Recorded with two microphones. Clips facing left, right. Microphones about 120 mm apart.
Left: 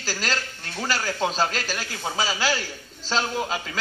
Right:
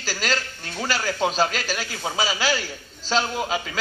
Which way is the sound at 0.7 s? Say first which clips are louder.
Right 1 dB; 10° right (ahead or behind).